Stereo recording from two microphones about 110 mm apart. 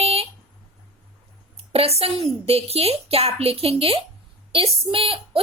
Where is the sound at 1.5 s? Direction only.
65° right (ahead or behind).